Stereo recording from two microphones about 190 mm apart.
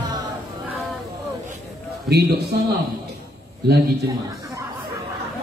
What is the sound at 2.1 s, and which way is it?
Speech, 55° right (ahead or behind).